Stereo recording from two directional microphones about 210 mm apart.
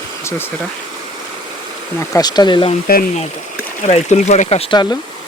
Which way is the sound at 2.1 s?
20° left (ahead or behind).